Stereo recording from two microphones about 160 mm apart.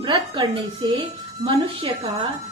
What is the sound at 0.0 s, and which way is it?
A woman's voice, 30° right (ahead or behind).